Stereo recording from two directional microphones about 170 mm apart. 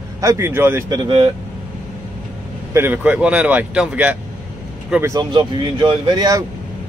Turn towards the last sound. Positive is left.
turn(degrees=-20)  # may be behind; listen again after turning